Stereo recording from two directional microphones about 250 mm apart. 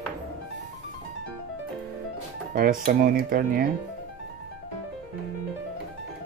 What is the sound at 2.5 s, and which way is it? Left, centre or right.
Speech, right.